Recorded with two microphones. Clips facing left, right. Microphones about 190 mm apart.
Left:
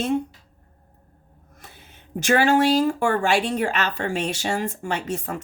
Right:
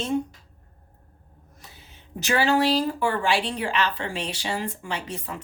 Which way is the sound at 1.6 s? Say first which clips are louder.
Left 3 dB; 55° left (ahead or behind).